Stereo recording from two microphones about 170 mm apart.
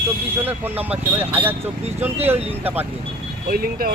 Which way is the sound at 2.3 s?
35° right (ahead or behind).